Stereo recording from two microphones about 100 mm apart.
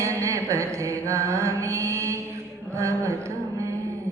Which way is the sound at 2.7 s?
30° right (ahead or behind).